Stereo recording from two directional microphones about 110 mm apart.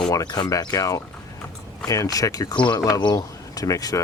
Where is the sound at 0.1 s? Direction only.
35° left (ahead or behind).